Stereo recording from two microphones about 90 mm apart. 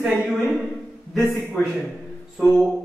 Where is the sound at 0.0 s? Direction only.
15° right (ahead or behind).